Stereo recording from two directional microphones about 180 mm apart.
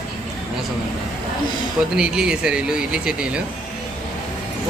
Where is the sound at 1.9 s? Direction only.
5° right (ahead or behind).